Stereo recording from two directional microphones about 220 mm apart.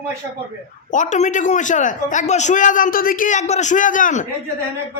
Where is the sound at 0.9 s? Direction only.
35° left (ahead or behind).